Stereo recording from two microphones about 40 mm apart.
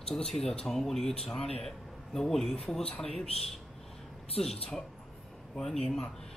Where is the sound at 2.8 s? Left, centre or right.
Left.